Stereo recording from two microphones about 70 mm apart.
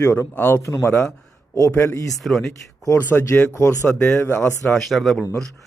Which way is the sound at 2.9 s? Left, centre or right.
Left.